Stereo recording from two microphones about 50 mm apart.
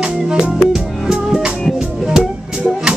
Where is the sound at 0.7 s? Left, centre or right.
Centre.